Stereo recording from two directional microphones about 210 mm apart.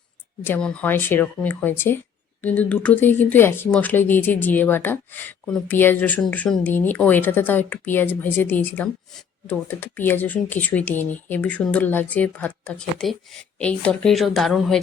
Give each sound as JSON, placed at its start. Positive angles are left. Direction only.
{"t": 0.4, "sound": "speech", "side_deg": 5}